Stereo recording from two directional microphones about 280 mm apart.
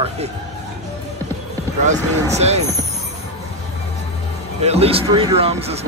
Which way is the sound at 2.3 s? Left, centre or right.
Right.